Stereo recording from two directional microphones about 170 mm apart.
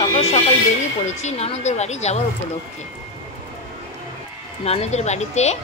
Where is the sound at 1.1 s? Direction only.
40° left (ahead or behind).